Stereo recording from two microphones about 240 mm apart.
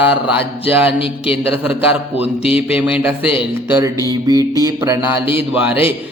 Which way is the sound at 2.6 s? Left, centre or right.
Centre.